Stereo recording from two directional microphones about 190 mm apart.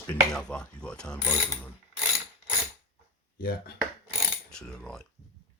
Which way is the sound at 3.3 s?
50° left (ahead or behind).